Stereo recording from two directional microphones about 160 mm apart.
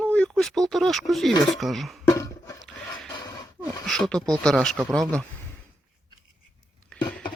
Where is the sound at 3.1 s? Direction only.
25° left (ahead or behind).